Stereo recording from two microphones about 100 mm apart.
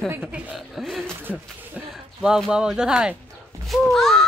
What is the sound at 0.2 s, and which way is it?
Speech, 10° right (ahead or behind).